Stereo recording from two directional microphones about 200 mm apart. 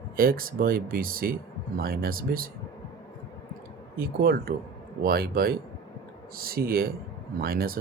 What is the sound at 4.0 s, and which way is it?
A man's voice, 50° right (ahead or behind).